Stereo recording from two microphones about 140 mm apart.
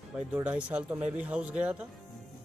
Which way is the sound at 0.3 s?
10° right (ahead or behind).